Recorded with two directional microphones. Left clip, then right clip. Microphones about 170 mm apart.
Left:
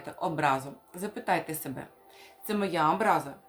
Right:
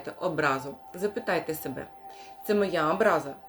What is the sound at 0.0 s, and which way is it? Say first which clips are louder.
A woman's voice: right 1 dB; 20° left (ahead or behind).